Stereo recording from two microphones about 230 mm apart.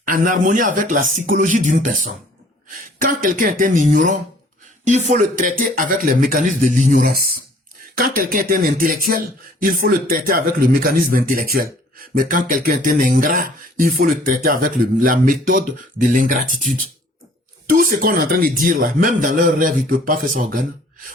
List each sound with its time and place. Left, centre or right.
0.0 s speech: right